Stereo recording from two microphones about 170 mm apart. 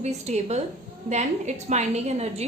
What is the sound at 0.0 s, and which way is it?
A woman's voice, 40° right (ahead or behind).